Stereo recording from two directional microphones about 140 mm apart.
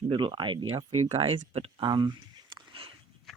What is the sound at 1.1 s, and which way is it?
Speech, 45° right (ahead or behind).